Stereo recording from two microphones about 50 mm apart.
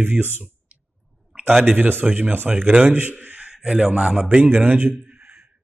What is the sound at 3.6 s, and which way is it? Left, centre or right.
Speech, right.